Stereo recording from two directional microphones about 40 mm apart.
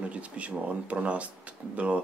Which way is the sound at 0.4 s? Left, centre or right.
Right.